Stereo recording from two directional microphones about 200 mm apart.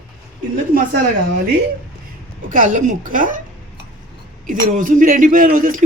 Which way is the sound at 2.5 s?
40° right (ahead or behind).